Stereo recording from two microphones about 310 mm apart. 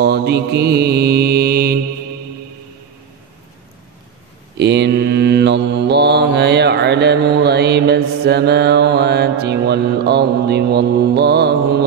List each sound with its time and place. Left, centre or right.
0.0 s mantra: right
4.6 s mantra: right